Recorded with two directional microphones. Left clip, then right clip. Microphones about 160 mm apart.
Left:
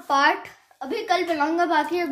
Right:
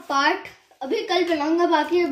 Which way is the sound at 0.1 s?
75° left (ahead or behind).